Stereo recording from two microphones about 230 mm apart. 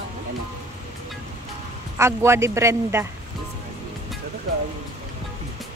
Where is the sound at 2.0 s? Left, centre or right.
Centre.